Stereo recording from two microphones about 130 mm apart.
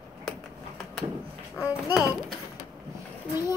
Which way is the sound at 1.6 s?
25° left (ahead or behind).